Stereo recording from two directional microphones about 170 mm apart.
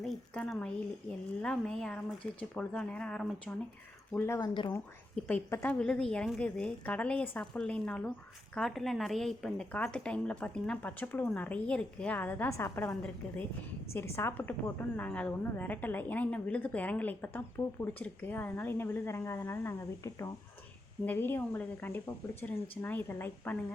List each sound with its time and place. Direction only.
0.0 s a woman's voice: 5° left (ahead or behind)
4.4 s speech: 25° left (ahead or behind)
5.3 s a woman's voice: 15° left (ahead or behind)
21.0 s a woman's voice: 10° left (ahead or behind)